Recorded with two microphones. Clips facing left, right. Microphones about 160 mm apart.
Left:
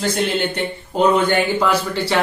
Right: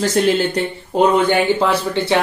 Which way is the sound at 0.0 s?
40° right (ahead or behind).